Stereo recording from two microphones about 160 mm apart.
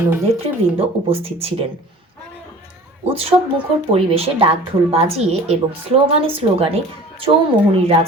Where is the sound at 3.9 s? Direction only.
40° right (ahead or behind).